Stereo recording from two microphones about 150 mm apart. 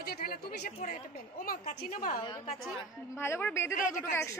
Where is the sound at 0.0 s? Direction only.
80° left.